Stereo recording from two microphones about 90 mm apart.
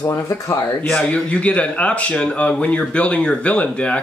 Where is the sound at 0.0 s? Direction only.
35° left (ahead or behind).